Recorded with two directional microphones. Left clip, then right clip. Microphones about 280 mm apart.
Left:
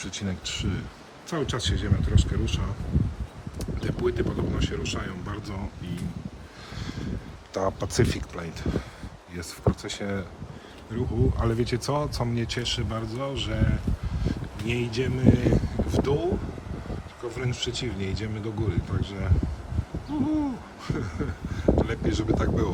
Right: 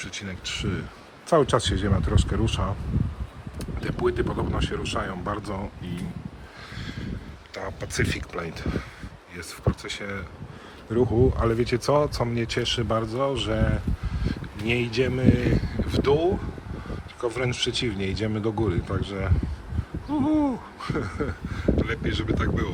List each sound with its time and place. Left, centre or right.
0.0 s speech: centre
6.7 s a sound: centre
7.9 s speech: centre